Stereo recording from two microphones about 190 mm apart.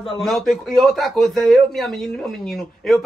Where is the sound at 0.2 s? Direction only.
Centre (ahead or behind).